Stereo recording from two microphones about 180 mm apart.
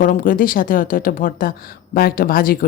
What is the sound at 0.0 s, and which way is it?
Speech, 50° left (ahead or behind).